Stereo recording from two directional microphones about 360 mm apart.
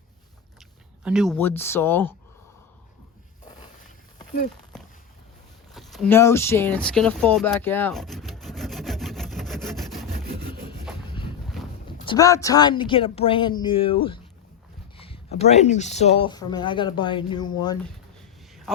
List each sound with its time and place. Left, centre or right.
0.6 s speech: centre
5.7 s a sound: centre
11.4 s boat: centre
12.0 s speech: centre